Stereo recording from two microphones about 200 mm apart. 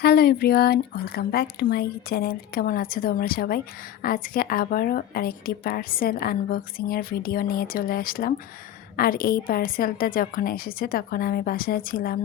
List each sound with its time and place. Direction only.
0.0 s a woman's voice: 50° left (ahead or behind)